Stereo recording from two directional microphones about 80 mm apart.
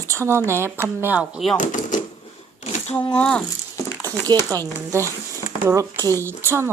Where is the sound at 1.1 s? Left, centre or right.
Centre.